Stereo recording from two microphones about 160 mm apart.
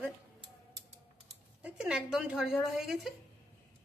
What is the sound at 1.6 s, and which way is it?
A woman's voice, 5° right (ahead or behind).